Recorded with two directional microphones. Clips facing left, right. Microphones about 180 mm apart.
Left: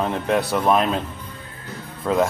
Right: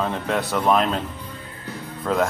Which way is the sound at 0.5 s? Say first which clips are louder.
Right 2 dB; 10° left (ahead or behind).